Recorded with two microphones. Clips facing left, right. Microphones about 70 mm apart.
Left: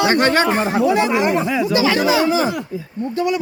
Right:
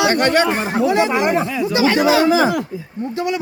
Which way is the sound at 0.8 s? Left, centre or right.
Centre.